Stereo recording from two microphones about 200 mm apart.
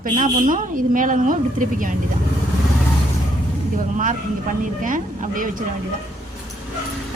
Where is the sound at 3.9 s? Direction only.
40° right (ahead or behind).